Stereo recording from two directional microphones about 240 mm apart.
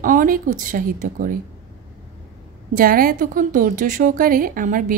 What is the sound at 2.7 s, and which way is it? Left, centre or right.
A woman's voice, right.